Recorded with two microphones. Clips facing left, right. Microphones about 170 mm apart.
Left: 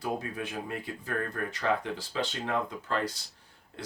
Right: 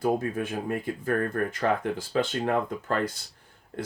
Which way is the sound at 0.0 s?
50° right (ahead or behind).